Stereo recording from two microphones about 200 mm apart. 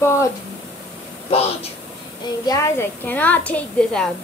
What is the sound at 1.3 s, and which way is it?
Speech, 30° left (ahead or behind).